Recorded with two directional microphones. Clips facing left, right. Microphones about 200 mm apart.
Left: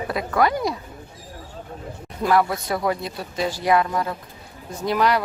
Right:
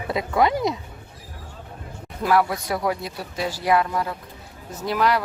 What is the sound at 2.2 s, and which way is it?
A woman's voice, 10° right (ahead or behind).